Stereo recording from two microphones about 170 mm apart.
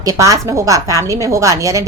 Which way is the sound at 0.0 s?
20° right (ahead or behind).